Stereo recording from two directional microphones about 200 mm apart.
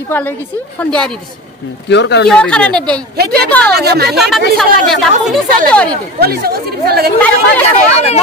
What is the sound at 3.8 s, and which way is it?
Speech, 55° right (ahead or behind).